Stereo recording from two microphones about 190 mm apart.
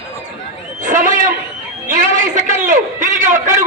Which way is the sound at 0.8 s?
45° right (ahead or behind).